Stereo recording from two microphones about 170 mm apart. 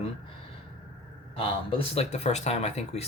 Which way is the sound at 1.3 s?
30° left (ahead or behind).